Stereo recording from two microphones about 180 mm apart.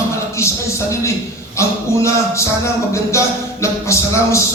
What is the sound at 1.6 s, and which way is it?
Music, 15° left (ahead or behind).